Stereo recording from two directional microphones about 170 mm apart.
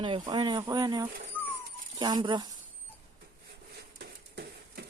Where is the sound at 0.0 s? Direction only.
25° right (ahead or behind).